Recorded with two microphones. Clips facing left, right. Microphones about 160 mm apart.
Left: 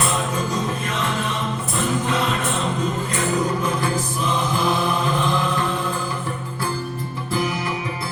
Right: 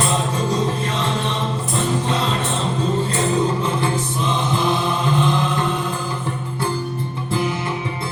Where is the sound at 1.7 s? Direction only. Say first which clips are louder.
Right 1 dB; 30° right (ahead or behind).